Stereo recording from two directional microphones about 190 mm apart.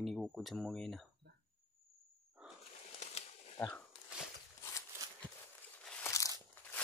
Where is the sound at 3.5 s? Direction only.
10° left (ahead or behind).